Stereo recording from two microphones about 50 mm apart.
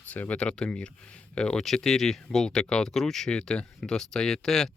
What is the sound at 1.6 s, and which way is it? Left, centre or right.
Speech, centre.